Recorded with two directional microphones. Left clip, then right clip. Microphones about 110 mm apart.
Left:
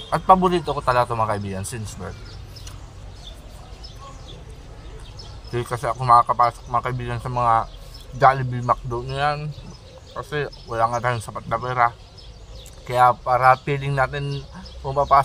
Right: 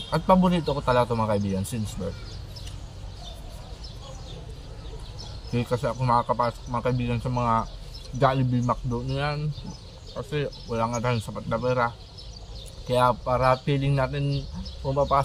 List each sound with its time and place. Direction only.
0.1 s a man's voice: 30° left (ahead or behind)
5.5 s a man's voice: 30° left (ahead or behind)